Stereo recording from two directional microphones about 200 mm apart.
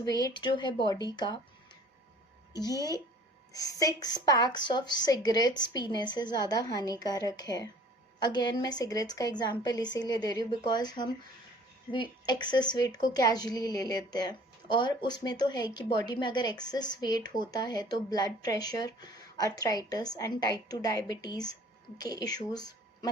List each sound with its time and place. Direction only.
0.0 s a woman's voice: 20° left (ahead or behind)
2.5 s a woman's voice: 20° left (ahead or behind)